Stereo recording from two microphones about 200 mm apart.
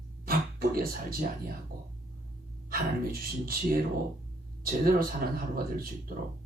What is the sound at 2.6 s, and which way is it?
Speech, 45° right (ahead or behind).